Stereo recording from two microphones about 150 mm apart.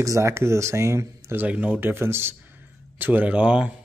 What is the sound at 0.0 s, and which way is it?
Speech, 20° right (ahead or behind).